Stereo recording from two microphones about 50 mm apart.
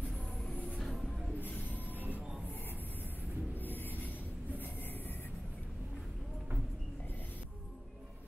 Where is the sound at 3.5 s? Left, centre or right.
Left.